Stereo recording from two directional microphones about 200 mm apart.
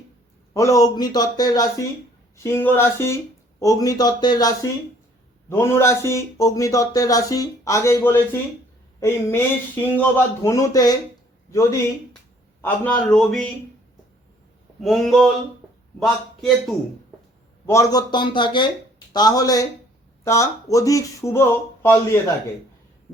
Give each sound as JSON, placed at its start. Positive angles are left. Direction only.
{"t": 0.5, "sound": "a man's voice", "side_deg": 15}
{"t": 12.6, "sound": "a man's voice", "side_deg": 10}
{"t": 14.8, "sound": "a man's voice", "side_deg": 0}
{"t": 17.7, "sound": "a man's voice", "side_deg": 15}